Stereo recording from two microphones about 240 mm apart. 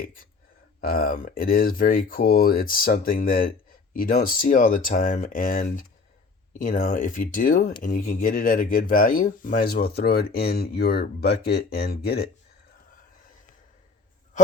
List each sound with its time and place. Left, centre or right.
0.8 s speech: left